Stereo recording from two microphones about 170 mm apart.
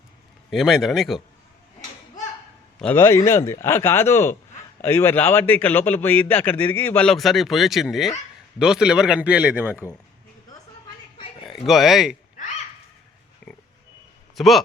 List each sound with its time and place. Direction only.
0.5 s a man's voice: centre (ahead or behind)
2.7 s a man's voice: 10° left (ahead or behind); by 9.8 s 10° right (ahead or behind)
11.2 s a sound: 30° left (ahead or behind)
11.6 s a man's voice: centre (ahead or behind)
14.3 s a man's voice: centre (ahead or behind)